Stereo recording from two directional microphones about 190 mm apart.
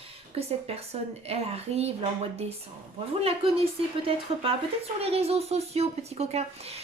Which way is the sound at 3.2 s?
30° right (ahead or behind).